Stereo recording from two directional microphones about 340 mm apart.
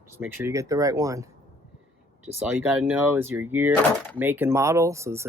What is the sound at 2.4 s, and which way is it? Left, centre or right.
Speech, centre.